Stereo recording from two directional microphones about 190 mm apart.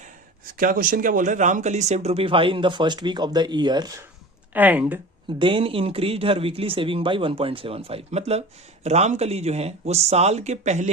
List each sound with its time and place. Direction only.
0.5 s speech: 45° right (ahead or behind); by 3.9 s 20° right (ahead or behind)
4.5 s speech: 10° right (ahead or behind)
5.4 s speech: 25° right (ahead or behind)